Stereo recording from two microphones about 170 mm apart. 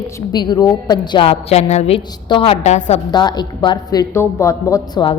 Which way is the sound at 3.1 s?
25° left (ahead or behind).